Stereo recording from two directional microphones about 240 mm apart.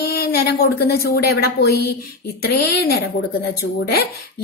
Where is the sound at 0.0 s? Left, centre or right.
Left.